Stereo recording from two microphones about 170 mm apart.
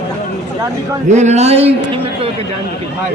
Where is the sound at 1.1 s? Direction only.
40° right (ahead or behind).